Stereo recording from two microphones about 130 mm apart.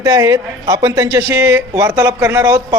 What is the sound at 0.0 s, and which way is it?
A man's voice, 20° right (ahead or behind).